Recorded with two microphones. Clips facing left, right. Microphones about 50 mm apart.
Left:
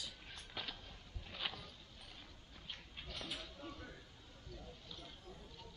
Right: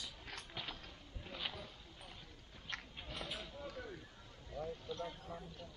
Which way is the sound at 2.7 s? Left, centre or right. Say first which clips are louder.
Right 10 dB; right.